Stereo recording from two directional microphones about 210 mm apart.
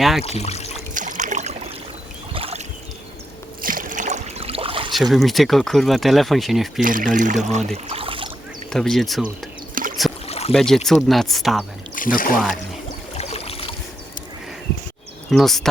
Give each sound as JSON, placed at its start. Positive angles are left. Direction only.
{"t": 0.2, "sound": "speech", "side_deg": 30}
{"t": 0.9, "sound": "trickle", "side_deg": -40}
{"t": 2.3, "sound": "boat", "side_deg": -25}
{"t": 3.6, "sound": "boat", "side_deg": -40}
{"t": 4.9, "sound": "speech", "side_deg": 0}
{"t": 6.8, "sound": "speech", "side_deg": -40}
{"t": 7.9, "sound": "a sound", "side_deg": -25}
{"t": 8.7, "sound": "speech", "side_deg": 0}
{"t": 9.8, "sound": "rowboat", "side_deg": -40}
{"t": 10.2, "sound": "boat", "side_deg": 30}
{"t": 10.5, "sound": "speech", "side_deg": 0}
{"t": 11.9, "sound": "speech", "side_deg": 40}
{"t": 13.1, "sound": "a sound", "side_deg": 30}
{"t": 15.3, "sound": "speech", "side_deg": 0}